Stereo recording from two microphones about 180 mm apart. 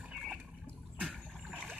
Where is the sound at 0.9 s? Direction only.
5° right (ahead or behind).